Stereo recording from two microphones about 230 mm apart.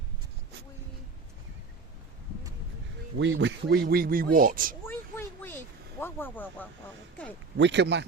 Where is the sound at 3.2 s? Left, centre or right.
Right.